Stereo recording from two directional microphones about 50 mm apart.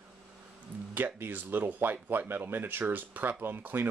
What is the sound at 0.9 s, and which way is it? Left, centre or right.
Speech, right.